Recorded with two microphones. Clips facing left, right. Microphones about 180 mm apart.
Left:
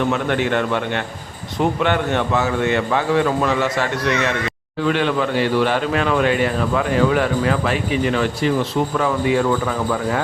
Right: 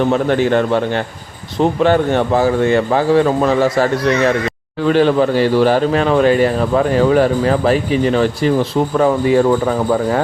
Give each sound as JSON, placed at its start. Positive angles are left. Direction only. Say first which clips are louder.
{"t": 0.1, "sound": "a man's voice", "louder": "right 6 dB", "side_deg": -35}